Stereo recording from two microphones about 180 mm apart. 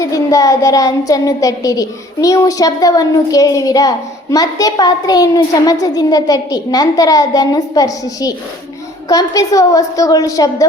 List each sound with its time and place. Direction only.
0.0 s a woman's voice: 20° left (ahead or behind)